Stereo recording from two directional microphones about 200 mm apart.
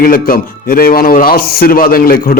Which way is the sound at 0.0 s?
45° left (ahead or behind).